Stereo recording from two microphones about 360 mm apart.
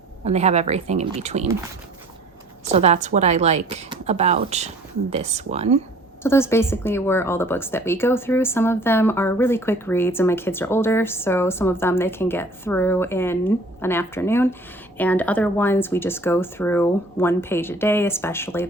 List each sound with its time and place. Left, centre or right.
0.3 s a woman's voice: centre
2.6 s a woman's voice: centre
6.2 s speech: centre